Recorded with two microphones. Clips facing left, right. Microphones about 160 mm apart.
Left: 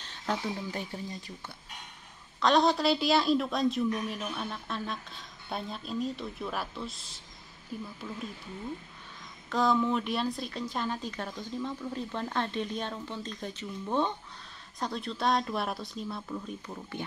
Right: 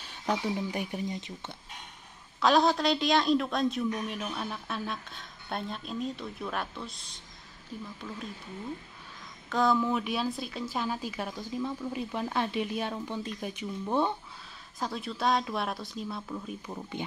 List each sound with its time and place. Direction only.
0.0 s a woman's voice: 15° right (ahead or behind)
2.4 s a woman's voice: centre (ahead or behind)
9.5 s a woman's voice: centre (ahead or behind)
16.6 s a woman's voice: 15° right (ahead or behind)